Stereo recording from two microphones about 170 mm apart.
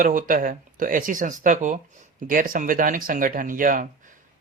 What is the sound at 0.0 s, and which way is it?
Speech, 50° right (ahead or behind).